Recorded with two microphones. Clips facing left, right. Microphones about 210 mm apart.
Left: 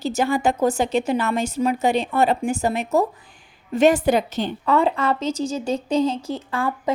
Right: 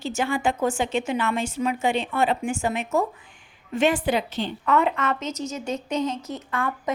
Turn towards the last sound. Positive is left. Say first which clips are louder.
# left 4 dB
turn(degrees=30)  # may be behind; listen again after turning